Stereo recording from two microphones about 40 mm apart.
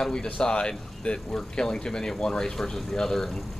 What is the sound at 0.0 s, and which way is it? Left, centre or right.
Speech, centre.